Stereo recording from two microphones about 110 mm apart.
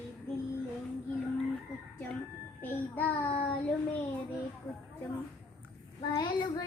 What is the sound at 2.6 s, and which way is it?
Child singing, 15° left (ahead or behind).